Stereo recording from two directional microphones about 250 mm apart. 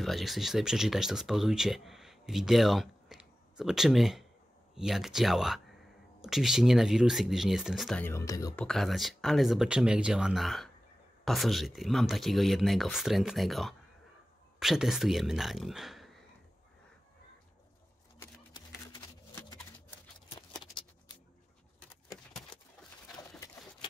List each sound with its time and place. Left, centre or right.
0.0 s speech: centre
8.6 s speech: centre
18.9 s a sound: centre